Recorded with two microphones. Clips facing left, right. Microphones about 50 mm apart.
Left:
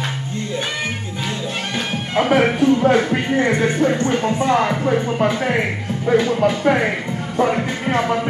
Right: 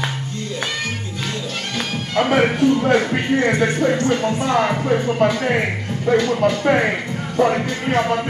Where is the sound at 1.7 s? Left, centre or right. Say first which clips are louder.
Even; left.